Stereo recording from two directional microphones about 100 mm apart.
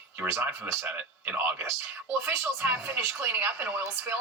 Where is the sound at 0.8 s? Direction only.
20° right (ahead or behind).